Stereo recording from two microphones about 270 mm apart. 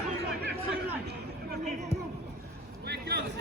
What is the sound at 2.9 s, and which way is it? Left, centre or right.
Vehicle, right.